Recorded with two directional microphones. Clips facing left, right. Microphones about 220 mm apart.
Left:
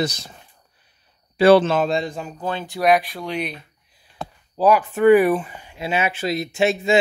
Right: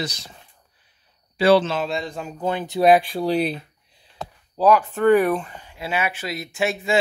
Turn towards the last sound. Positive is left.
turn(degrees=25)  # may be behind; listen again after turning